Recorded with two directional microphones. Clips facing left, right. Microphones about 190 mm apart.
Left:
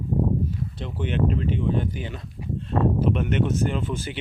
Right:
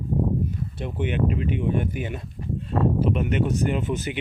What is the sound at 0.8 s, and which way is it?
Speech, 15° right (ahead or behind).